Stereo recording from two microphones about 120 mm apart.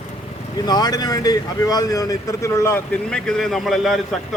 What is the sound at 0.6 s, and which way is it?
Speech, 35° left (ahead or behind).